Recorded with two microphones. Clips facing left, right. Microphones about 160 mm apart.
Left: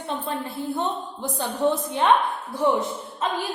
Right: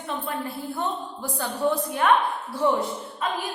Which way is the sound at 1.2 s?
20° left (ahead or behind).